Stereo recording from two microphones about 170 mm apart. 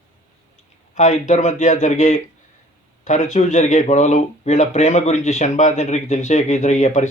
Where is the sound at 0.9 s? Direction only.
45° left (ahead or behind).